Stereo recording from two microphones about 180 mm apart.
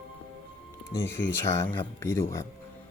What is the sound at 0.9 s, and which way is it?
Speech, 15° left (ahead or behind).